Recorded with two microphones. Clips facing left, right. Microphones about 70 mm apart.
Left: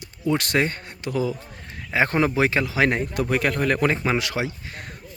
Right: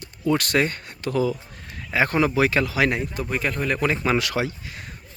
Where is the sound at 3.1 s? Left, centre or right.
Left.